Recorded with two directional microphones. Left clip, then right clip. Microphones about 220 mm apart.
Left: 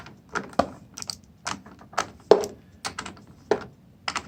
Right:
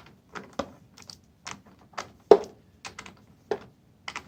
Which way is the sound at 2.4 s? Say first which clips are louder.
Left 8 dB; 15° left (ahead or behind).